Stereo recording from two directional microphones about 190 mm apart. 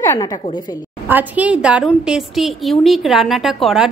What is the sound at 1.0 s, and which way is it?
A woman's voice, 10° right (ahead or behind).